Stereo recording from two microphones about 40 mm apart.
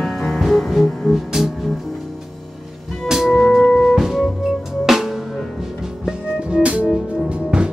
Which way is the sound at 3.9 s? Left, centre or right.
Centre.